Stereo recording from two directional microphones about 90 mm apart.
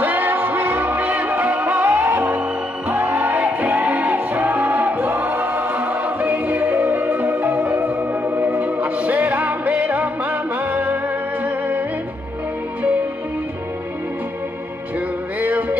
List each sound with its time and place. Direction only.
0.0 s music: 20° right (ahead or behind)